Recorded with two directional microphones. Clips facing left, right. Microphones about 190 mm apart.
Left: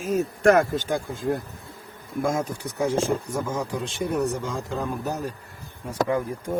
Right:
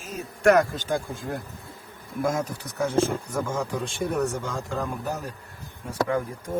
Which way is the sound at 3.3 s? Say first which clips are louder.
Even; 10° left (ahead or behind).